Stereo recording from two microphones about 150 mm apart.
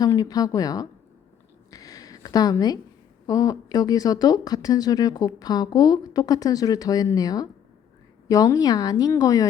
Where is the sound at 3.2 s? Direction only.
25° left (ahead or behind).